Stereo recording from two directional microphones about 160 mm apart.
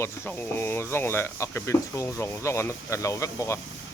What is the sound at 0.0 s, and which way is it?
Speech, 10° left (ahead or behind).